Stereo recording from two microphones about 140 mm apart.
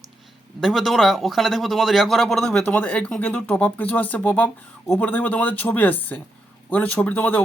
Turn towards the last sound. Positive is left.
turn(degrees=10)  # may be behind; listen again after turning